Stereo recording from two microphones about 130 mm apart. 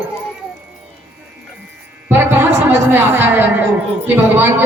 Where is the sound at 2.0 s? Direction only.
20° right (ahead or behind).